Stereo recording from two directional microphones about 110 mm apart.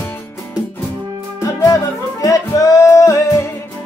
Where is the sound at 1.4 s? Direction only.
30° left (ahead or behind).